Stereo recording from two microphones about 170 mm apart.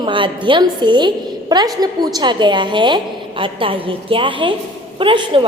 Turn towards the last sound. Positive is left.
turn(degrees=-30)  # may be behind; listen again after turning